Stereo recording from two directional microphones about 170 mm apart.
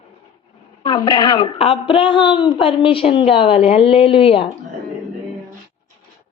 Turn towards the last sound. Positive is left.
turn(degrees=30)  # may be behind; listen again after turning